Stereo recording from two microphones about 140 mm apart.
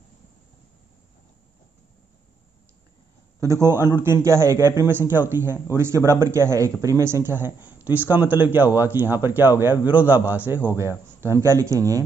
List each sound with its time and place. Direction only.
3.6 s speech: 15° right (ahead or behind)